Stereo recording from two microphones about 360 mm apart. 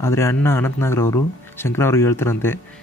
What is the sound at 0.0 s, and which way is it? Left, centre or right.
Speech, centre.